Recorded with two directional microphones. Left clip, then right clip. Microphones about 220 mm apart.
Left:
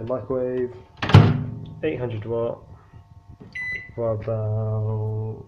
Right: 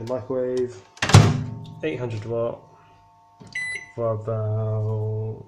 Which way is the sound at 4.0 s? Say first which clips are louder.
Even; 15° right (ahead or behind).